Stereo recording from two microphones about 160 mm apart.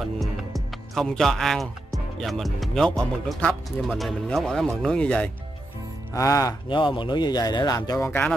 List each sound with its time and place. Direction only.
0.0 s speech: centre (ahead or behind)
6.1 s speech: 20° left (ahead or behind)